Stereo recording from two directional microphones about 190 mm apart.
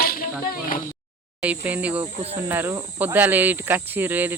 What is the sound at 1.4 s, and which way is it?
Speech, 5° right (ahead or behind).